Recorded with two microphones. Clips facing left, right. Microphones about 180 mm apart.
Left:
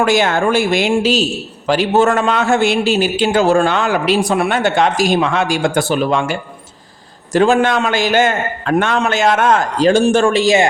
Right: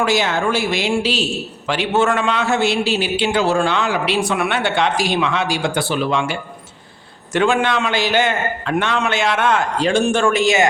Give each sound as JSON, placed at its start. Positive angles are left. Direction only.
{"t": 0.0, "sound": "a man's voice", "side_deg": 50}
{"t": 7.3, "sound": "a man's voice", "side_deg": 40}